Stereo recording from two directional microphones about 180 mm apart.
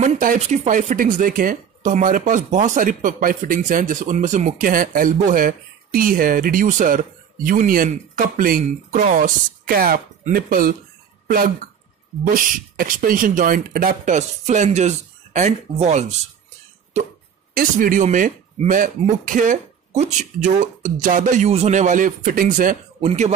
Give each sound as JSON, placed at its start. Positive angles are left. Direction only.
{"t": 0.0, "sound": "speech", "side_deg": -45}
{"t": 12.7, "sound": "speech", "side_deg": -50}
{"t": 17.6, "sound": "speech", "side_deg": -50}
{"t": 22.9, "sound": "speech", "side_deg": -35}